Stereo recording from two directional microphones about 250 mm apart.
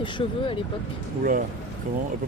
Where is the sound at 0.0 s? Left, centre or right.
Left.